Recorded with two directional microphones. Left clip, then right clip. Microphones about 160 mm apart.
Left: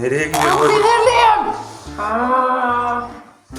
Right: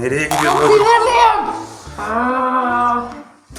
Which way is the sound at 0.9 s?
5° left (ahead or behind).